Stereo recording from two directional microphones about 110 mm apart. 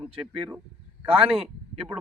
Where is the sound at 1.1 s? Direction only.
60° right (ahead or behind).